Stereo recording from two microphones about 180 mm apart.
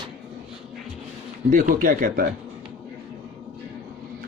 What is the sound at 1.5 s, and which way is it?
Speech, 50° right (ahead or behind).